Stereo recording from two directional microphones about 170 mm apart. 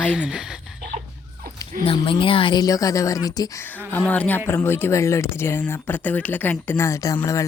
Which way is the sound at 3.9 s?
10° left (ahead or behind).